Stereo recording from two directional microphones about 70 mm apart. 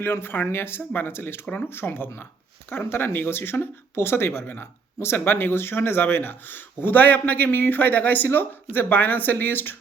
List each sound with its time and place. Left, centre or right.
0.0 s speech: left